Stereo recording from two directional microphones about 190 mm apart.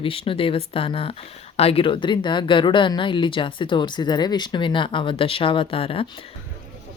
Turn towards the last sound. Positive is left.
turn(degrees=30)  # may be behind; listen again after turning